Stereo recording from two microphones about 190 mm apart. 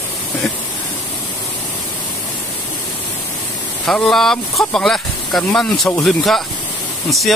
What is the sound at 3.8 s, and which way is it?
Speech, centre (ahead or behind).